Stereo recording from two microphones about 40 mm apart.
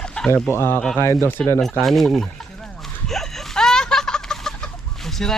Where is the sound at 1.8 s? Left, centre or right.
Centre.